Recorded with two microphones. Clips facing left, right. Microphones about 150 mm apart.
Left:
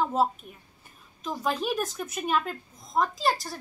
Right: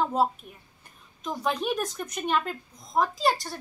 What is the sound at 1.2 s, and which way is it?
Speech, centre (ahead or behind).